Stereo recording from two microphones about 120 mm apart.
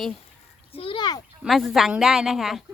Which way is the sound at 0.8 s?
45° left (ahead or behind).